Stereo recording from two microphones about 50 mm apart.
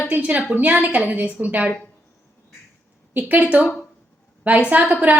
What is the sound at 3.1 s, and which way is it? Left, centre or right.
Speech, right.